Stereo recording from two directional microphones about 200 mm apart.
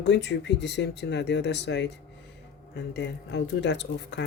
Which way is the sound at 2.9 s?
60° left (ahead or behind).